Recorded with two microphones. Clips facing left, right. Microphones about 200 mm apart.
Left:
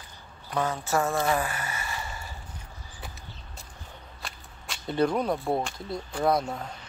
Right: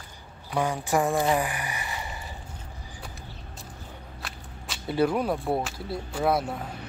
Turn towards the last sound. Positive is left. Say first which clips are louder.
# even
turn(degrees=-5)  # may be behind; listen again after turning